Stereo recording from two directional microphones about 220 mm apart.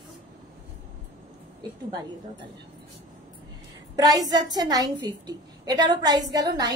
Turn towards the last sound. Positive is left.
turn(degrees=-15)  # may be behind; listen again after turning